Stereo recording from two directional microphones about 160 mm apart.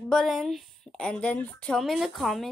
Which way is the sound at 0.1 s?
Centre (ahead or behind).